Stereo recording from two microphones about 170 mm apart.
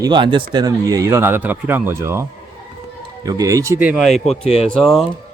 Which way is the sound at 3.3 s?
20° right (ahead or behind).